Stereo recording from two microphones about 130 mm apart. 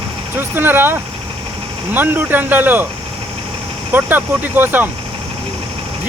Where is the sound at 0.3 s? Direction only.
15° right (ahead or behind).